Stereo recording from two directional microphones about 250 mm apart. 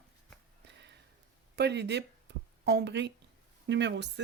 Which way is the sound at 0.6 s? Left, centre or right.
Right.